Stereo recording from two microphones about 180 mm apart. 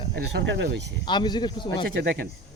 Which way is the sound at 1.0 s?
25° left (ahead or behind).